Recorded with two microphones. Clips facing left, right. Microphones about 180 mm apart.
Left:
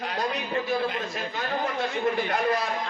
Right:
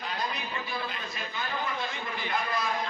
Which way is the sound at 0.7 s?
50° left (ahead or behind).